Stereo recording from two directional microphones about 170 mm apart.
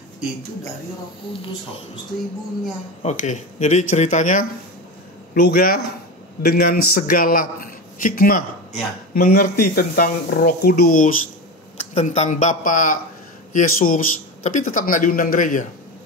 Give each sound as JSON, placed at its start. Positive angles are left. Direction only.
{"t": 1.3, "sound": "speech", "side_deg": 35}
{"t": 3.0, "sound": "speech", "side_deg": 45}
{"t": 5.3, "sound": "a man's voice", "side_deg": 60}
{"t": 11.8, "sound": "speech", "side_deg": 40}